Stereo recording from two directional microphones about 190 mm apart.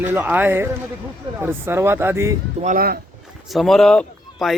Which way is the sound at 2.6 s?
45° right (ahead or behind).